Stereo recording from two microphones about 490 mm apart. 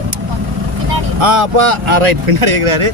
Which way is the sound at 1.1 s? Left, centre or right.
Right.